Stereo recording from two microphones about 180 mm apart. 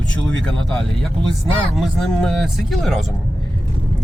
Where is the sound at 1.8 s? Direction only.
Centre (ahead or behind).